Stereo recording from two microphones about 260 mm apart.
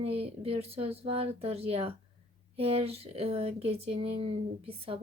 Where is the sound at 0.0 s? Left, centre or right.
Right.